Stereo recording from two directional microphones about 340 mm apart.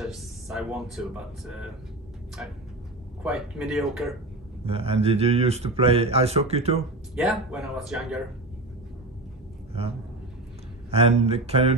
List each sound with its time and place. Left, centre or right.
0.0 s speech: centre
3.2 s speech: centre
4.6 s speech: centre
7.2 s speech: centre
10.9 s speech: centre